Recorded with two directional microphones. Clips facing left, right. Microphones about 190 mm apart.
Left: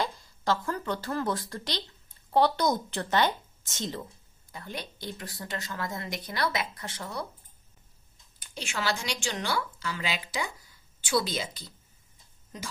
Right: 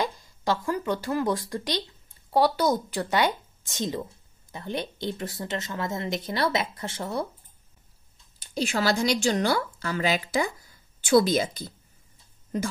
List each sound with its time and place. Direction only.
0.0 s speech: 15° right (ahead or behind)
8.5 s a woman's voice: 40° right (ahead or behind)